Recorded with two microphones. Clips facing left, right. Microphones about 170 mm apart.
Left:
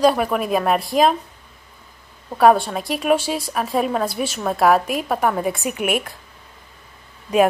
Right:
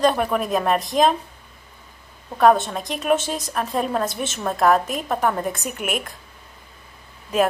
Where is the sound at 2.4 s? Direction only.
5° left (ahead or behind).